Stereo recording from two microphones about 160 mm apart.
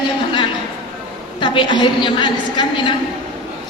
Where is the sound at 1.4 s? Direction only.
30° left (ahead or behind).